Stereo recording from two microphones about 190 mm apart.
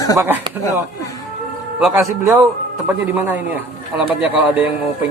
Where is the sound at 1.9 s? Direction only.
10° right (ahead or behind).